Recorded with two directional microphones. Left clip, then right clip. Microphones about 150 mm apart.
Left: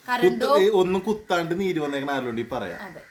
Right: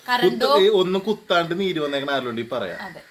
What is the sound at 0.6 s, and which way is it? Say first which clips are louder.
A man's voice: right 2 dB; 25° left (ahead or behind).